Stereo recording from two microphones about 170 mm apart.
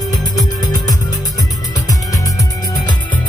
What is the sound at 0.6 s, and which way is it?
Music, 20° left (ahead or behind).